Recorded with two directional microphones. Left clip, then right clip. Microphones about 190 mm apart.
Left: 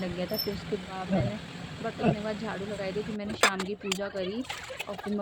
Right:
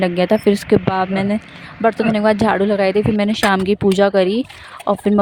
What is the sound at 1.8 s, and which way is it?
Speech, 65° right (ahead or behind).